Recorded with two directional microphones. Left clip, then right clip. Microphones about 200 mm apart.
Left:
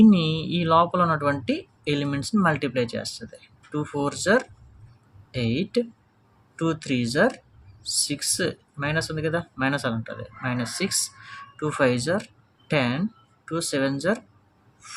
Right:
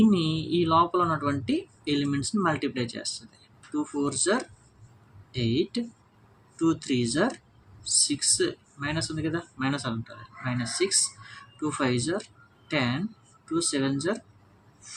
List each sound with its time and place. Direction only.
0.1 s speech: 55° left (ahead or behind)